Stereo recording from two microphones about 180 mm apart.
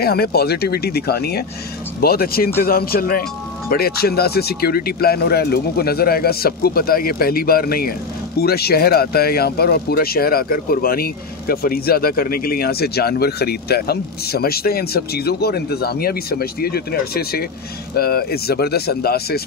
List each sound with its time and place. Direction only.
0.0 s speech: 60° left (ahead or behind)